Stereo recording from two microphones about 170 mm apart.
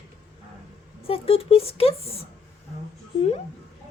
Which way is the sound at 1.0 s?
35° left (ahead or behind).